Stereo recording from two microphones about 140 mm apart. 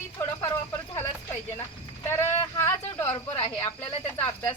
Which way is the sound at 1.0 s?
20° left (ahead or behind).